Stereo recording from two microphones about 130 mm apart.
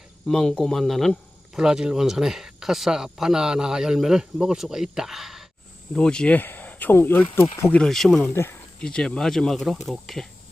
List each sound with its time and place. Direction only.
0.3 s speech: 5° left (ahead or behind)
7.8 s speech: 5° left (ahead or behind)